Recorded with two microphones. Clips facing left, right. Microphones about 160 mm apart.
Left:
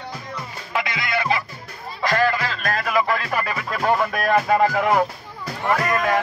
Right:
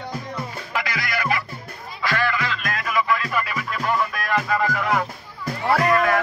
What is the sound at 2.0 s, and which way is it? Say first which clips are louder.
Music: left 4 dB; 40° left (ahead or behind).